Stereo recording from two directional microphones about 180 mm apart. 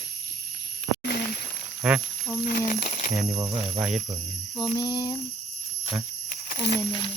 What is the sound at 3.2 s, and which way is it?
Speech, 20° right (ahead or behind).